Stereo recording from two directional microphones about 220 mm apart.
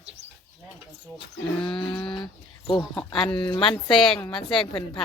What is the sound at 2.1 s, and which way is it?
Speech, 20° left (ahead or behind).